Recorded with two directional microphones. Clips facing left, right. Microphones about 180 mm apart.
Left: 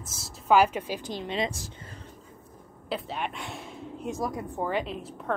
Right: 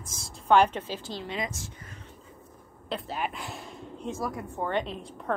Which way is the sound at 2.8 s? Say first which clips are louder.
Even; centre (ahead or behind).